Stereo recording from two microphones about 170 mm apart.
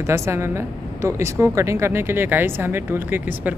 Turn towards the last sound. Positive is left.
turn(degrees=-10)  # may be behind; listen again after turning